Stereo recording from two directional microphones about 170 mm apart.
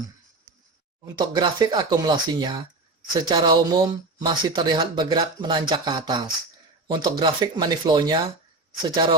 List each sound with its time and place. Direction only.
1.0 s speech: 25° right (ahead or behind)